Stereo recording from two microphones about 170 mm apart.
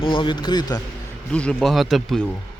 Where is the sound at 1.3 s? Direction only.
5° left (ahead or behind).